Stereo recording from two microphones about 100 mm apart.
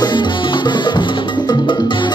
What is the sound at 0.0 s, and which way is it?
Music, 50° left (ahead or behind).